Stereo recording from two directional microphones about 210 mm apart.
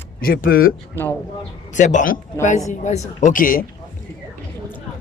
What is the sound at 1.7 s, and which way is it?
Speech, 35° left (ahead or behind).